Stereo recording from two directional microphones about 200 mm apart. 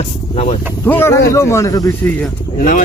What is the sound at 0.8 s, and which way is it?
Speech, 10° left (ahead or behind).